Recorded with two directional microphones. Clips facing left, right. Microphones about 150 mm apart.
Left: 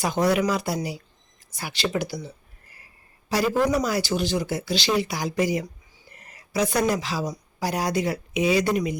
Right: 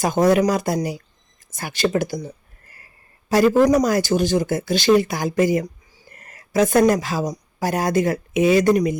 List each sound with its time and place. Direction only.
0.0 s speech: 45° right (ahead or behind)